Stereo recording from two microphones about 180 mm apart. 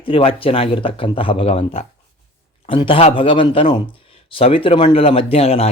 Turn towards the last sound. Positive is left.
turn(degrees=35)  # may be behind; listen again after turning